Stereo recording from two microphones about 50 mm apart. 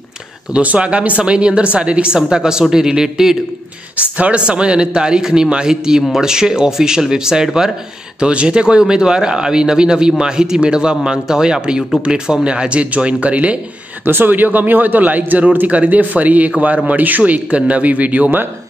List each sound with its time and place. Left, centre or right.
0.5 s speech: right; by 3.3 s centre
4.0 s speech: right
14.0 s a man's voice: right